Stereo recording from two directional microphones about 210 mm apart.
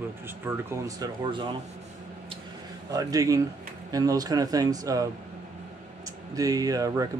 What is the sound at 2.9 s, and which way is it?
Speech, 15° right (ahead or behind).